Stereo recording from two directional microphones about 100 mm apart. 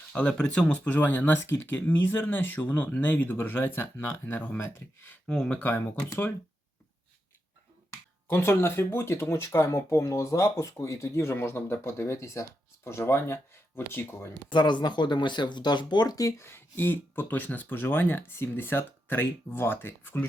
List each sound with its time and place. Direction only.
0.1 s speech: 10° left (ahead or behind)
5.2 s speech: 5° left (ahead or behind)
8.3 s speech: 25° left (ahead or behind)
14.5 s speech: 50° left (ahead or behind)
16.5 s speech: 20° left (ahead or behind)